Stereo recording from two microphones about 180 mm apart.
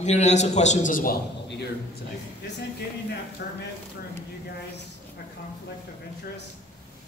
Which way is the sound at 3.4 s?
60° left (ahead or behind).